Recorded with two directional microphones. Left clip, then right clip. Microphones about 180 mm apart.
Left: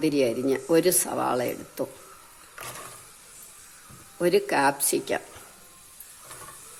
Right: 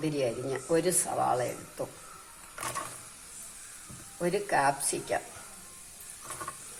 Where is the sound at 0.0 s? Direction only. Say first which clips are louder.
Left 7 dB; 65° left (ahead or behind).